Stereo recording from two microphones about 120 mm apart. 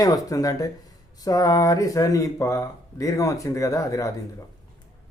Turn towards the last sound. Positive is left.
turn(degrees=25)  # may be behind; listen again after turning